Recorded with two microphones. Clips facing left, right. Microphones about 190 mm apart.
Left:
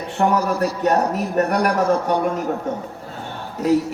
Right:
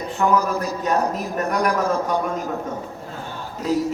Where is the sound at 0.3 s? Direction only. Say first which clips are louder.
Even; 70° left (ahead or behind).